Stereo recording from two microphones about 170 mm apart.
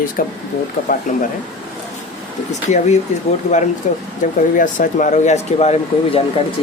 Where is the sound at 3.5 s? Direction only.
40° left (ahead or behind).